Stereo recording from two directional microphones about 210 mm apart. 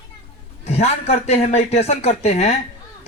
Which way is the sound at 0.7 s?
30° left (ahead or behind).